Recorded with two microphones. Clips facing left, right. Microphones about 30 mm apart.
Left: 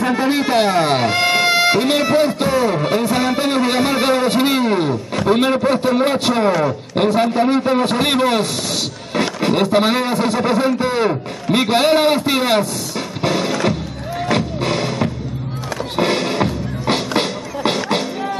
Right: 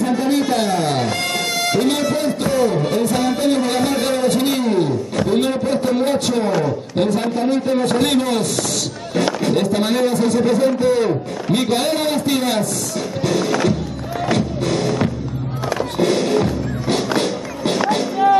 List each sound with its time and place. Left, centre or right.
0.0 s speech: left
13.2 s music: left
16.0 s music: left